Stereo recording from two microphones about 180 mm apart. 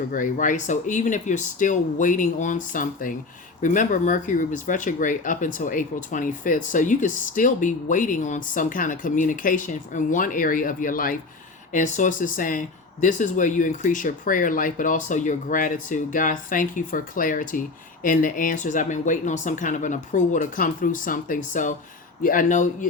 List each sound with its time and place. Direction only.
0.1 s speech: 45° left (ahead or behind)